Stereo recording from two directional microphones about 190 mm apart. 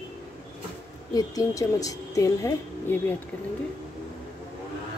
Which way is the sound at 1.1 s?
20° left (ahead or behind).